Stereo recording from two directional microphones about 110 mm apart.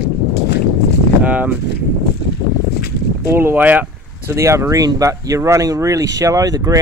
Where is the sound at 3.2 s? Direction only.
20° right (ahead or behind).